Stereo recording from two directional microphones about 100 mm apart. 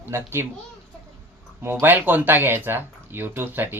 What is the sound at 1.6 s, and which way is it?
Speech, 20° right (ahead or behind).